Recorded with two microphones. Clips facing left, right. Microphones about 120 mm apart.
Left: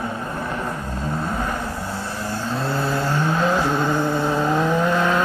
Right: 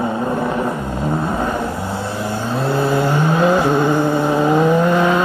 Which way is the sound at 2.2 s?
20° right (ahead or behind).